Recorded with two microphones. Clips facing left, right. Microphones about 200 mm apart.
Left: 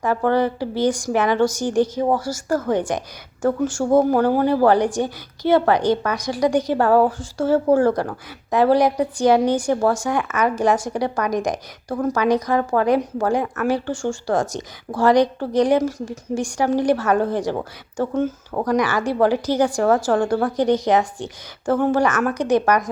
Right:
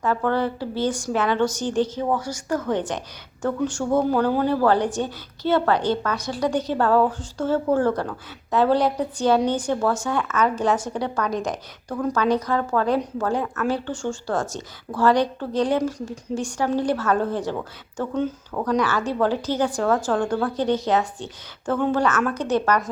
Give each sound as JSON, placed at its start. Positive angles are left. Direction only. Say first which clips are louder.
{"t": 0.3, "sound": "a woman's voice", "louder": "left 4 dB", "side_deg": 15}
{"t": 3.8, "sound": "speech", "louder": "left 5 dB", "side_deg": 30}
{"t": 4.4, "sound": "a woman's voice", "louder": "left 3 dB", "side_deg": 15}